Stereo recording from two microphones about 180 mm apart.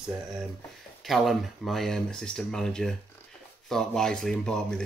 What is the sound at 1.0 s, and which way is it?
Speech, centre (ahead or behind).